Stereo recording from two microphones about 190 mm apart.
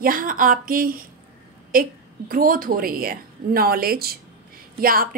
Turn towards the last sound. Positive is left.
turn(degrees=-50)  # may be behind; listen again after turning